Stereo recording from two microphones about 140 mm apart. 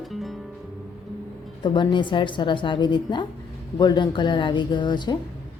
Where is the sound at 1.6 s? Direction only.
35° left (ahead or behind).